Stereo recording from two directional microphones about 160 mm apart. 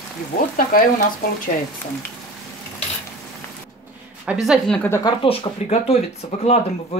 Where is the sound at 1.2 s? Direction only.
65° left (ahead or behind).